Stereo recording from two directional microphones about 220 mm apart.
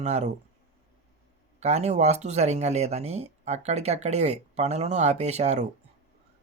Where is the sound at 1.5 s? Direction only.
30° right (ahead or behind).